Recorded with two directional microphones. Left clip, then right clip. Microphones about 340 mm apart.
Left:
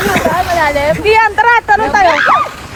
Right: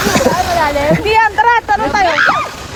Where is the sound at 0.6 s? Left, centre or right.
Left.